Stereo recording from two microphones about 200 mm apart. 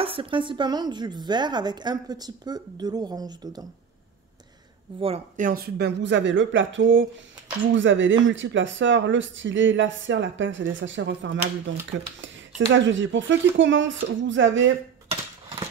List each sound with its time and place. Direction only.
0.0 s a woman's voice: 25° right (ahead or behind)
5.0 s speech: 35° right (ahead or behind); by 14.7 s 70° right (ahead or behind)